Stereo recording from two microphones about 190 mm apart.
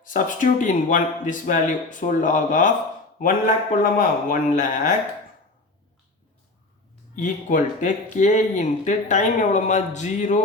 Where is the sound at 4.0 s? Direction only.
45° left (ahead or behind).